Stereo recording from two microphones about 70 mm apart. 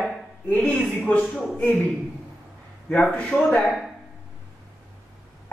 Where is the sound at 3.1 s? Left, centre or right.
Centre.